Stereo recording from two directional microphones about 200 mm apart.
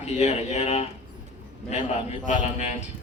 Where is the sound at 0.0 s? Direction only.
35° left (ahead or behind).